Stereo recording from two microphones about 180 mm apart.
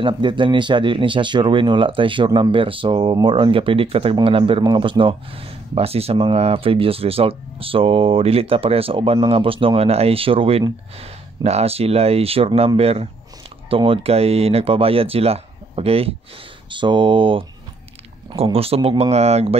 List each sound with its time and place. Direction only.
0.0 s speech: 25° right (ahead or behind)